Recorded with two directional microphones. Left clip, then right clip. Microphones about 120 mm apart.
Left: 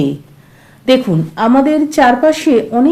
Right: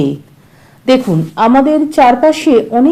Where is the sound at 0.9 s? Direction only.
15° right (ahead or behind).